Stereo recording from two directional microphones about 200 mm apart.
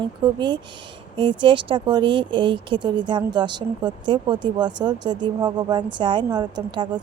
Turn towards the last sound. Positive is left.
turn(degrees=-20)  # may be behind; listen again after turning